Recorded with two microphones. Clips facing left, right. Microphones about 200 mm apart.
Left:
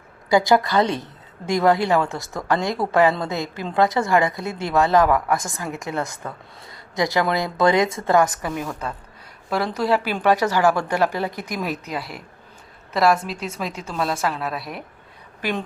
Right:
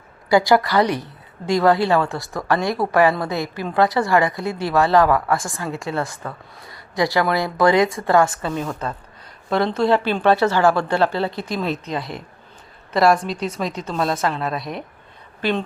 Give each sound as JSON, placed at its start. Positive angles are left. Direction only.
{"t": 0.3, "sound": "a woman's voice", "side_deg": 20}
{"t": 11.3, "sound": "speech", "side_deg": -25}
{"t": 11.5, "sound": "a woman's voice", "side_deg": 10}